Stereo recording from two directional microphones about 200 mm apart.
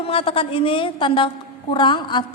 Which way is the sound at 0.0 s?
25° left (ahead or behind).